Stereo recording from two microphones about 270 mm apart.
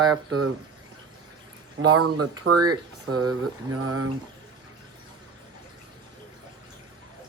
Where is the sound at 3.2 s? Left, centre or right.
Right.